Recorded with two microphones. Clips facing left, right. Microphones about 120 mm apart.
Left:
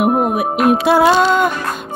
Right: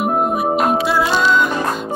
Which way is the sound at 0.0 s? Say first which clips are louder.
Left 3 dB; 60° left (ahead or behind).